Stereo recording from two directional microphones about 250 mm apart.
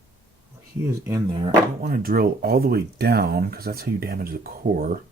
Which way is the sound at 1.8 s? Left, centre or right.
Right.